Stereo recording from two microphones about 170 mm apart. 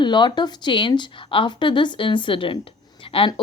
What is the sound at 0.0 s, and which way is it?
Speech, 25° left (ahead or behind).